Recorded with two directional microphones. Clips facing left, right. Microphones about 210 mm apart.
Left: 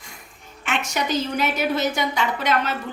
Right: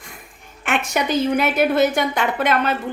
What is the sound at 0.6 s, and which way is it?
A woman's voice, 55° right (ahead or behind).